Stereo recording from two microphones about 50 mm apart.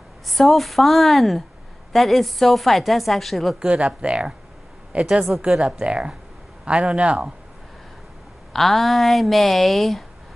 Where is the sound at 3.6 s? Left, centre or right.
Right.